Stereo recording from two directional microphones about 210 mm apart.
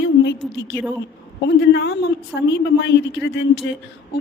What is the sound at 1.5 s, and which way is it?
A woman's voice, 55° left (ahead or behind).